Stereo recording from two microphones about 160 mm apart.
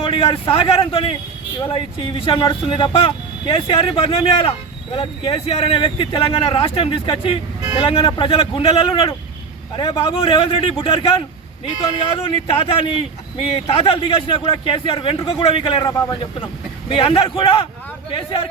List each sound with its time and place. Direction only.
0.0 s a man's voice: 35° left (ahead or behind)
12.5 s a man's voice: 35° left (ahead or behind)